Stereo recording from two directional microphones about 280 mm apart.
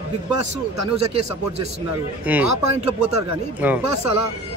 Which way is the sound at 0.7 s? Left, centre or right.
Right.